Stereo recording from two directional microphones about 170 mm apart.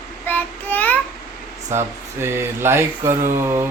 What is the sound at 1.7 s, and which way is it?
Speech, 15° right (ahead or behind).